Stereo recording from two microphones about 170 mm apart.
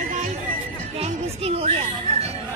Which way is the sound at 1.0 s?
35° right (ahead or behind).